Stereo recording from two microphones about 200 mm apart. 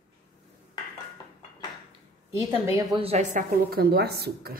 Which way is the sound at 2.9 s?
30° right (ahead or behind).